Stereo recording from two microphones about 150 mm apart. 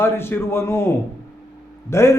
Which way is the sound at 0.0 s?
15° left (ahead or behind).